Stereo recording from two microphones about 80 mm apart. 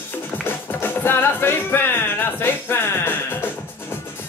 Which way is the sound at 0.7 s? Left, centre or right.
Left.